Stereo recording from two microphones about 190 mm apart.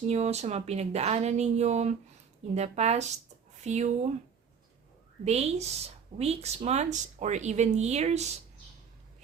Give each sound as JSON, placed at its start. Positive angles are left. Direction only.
{"t": 0.1, "sound": "speech", "side_deg": -35}
{"t": 5.2, "sound": "speech", "side_deg": -35}